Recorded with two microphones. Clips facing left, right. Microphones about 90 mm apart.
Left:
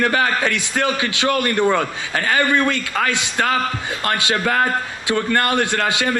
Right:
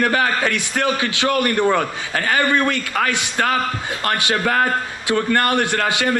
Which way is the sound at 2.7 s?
20° left (ahead or behind).